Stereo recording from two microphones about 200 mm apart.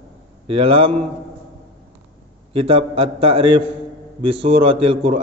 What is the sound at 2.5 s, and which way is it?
A man's voice, 30° right (ahead or behind).